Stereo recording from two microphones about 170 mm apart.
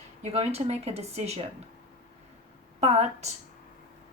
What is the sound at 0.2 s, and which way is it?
A woman's voice, 40° right (ahead or behind).